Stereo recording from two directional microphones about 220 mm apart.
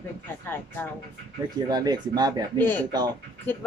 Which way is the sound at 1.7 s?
20° right (ahead or behind).